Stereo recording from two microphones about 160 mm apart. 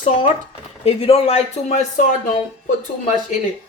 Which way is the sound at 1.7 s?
55° left (ahead or behind).